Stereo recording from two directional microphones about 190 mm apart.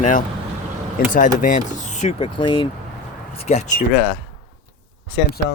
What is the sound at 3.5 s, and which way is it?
Speech, 40° left (ahead or behind).